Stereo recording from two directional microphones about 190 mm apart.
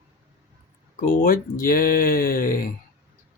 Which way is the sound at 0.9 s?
50° left (ahead or behind).